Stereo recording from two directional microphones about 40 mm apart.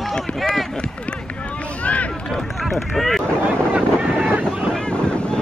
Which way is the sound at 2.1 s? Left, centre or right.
Centre.